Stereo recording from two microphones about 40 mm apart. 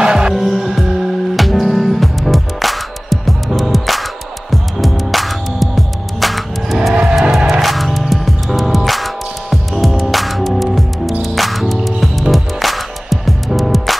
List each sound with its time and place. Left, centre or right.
0.0 s music: right
0.3 s music: centre